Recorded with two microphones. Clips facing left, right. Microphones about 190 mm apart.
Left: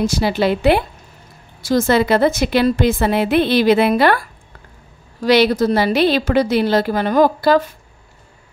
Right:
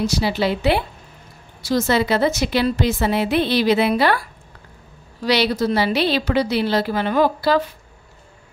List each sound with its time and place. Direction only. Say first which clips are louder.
0.0 s a woman's voice: left 3 dB; 50° left (ahead or behind)